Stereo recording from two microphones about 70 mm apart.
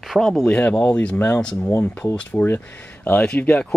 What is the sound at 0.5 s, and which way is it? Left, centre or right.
Speech, centre.